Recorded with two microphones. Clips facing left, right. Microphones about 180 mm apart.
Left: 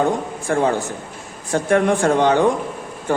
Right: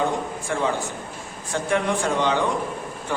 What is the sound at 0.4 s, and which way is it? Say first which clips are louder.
Speech: left 8 dB; 50° left (ahead or behind).